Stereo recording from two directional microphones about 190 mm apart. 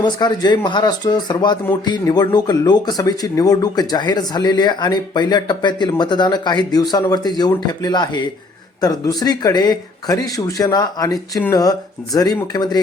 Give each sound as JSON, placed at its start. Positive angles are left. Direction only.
{"t": 0.0, "sound": "speech", "side_deg": 20}